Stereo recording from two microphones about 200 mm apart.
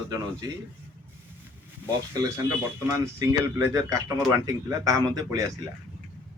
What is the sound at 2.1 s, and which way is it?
Speech, 15° right (ahead or behind).